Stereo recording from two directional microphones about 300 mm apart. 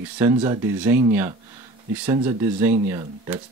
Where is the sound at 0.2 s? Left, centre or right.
Centre.